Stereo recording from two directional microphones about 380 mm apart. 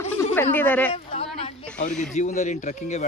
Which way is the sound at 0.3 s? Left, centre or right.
Centre.